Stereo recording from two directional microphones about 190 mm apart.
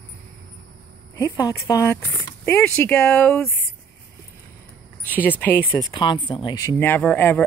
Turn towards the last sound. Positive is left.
turn(degrees=10)  # may be behind; listen again after turning